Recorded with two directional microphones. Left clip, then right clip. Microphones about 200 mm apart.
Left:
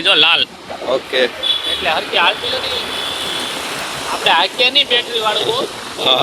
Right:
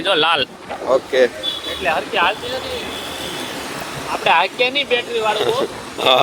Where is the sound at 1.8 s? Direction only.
5° right (ahead or behind).